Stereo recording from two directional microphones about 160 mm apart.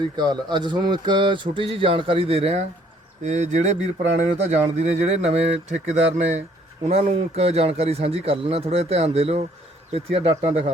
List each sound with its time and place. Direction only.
0.2 s speech: 30° right (ahead or behind)